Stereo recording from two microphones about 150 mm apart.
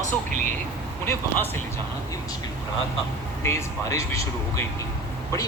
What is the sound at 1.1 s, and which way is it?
Speech, 15° left (ahead or behind).